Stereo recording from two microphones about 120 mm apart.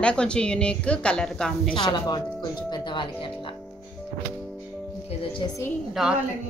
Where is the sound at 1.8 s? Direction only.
40° left (ahead or behind).